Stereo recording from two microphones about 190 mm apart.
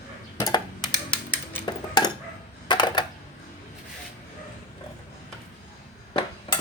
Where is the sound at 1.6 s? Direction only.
20° left (ahead or behind).